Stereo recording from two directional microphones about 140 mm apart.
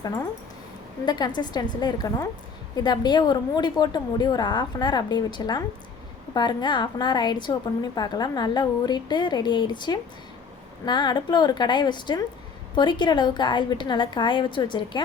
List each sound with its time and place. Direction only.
1.0 s a woman's voice: 30° left (ahead or behind)